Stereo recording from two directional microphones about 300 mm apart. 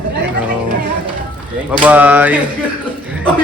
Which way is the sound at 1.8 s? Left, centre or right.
Centre.